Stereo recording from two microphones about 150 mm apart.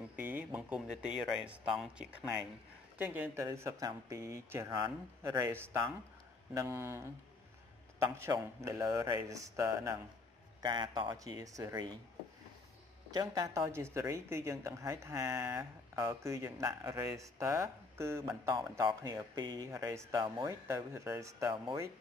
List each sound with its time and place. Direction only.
0.1 s speech: 10° right (ahead or behind)
13.1 s speech: 25° right (ahead or behind)
19.1 s speech: 25° right (ahead or behind)